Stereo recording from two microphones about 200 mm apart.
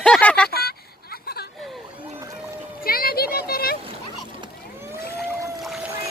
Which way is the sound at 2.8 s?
45° left (ahead or behind).